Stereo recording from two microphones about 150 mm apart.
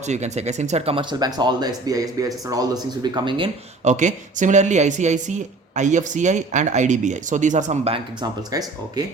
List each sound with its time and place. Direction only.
0.0 s speech: 50° right (ahead or behind)
1.2 s speech: 30° right (ahead or behind)
3.8 s speech: 55° right (ahead or behind); by 8.3 s 40° right (ahead or behind)
8.5 s speech: 25° right (ahead or behind)